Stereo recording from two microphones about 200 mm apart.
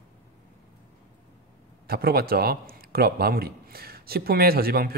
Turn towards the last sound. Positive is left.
turn(degrees=-50)  # may be behind; listen again after turning